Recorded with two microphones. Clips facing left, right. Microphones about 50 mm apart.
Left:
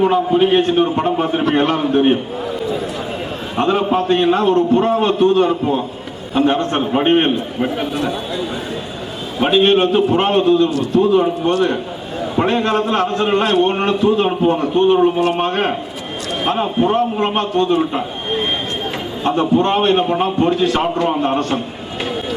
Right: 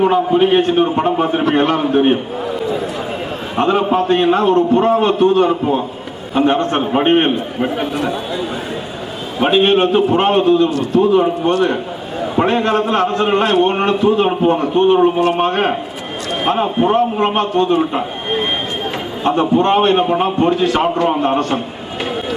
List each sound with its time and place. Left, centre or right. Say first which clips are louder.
0.0 s a man's voice: right 1 dB; centre
3.5 s a man's voice: right 1 dB; right
9.4 s a man's voice: right 1 dB; right